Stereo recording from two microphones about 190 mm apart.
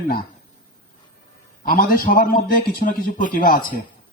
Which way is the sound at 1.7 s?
50° left (ahead or behind).